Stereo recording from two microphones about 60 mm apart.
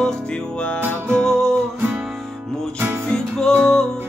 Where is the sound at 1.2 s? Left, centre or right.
Centre.